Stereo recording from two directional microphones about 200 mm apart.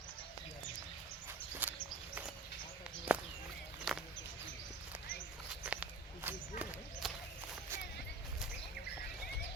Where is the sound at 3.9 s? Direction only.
Centre (ahead or behind).